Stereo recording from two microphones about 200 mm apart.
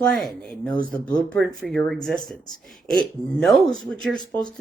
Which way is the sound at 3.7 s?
75° right (ahead or behind).